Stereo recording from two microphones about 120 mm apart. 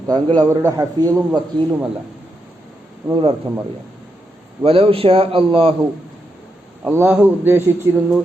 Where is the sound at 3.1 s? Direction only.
45° right (ahead or behind).